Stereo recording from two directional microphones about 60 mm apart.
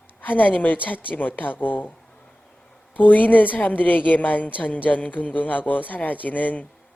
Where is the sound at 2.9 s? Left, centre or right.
Left.